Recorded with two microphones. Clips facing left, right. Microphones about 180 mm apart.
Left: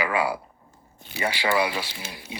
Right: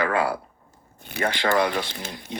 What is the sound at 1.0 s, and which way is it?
Speech, 55° right (ahead or behind).